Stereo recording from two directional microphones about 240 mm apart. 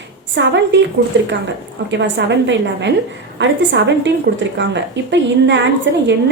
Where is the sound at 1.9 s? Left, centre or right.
Right.